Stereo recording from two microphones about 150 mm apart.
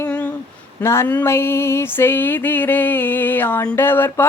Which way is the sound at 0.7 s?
15° left (ahead or behind).